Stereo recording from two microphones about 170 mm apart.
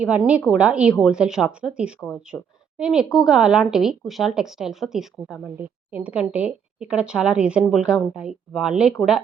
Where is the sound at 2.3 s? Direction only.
15° left (ahead or behind).